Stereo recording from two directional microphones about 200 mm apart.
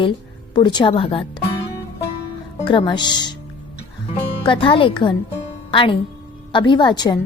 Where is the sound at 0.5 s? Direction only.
25° left (ahead or behind).